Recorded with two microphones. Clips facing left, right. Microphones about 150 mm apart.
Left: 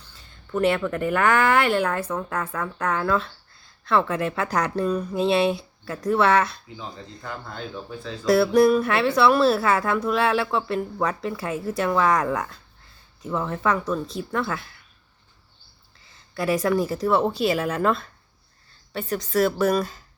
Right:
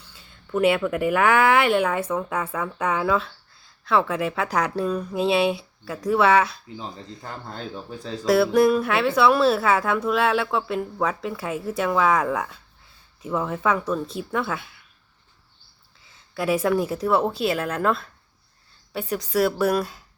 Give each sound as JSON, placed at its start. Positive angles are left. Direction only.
{"t": 0.5, "sound": "speech", "side_deg": -5}
{"t": 6.7, "sound": "speech", "side_deg": -35}
{"t": 8.2, "sound": "speech", "side_deg": 0}
{"t": 16.0, "sound": "a woman's voice", "side_deg": 0}